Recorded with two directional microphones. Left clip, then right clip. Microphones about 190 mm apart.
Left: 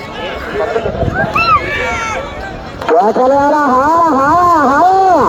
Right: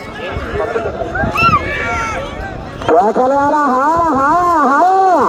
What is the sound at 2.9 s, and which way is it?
Music, 20° right (ahead or behind).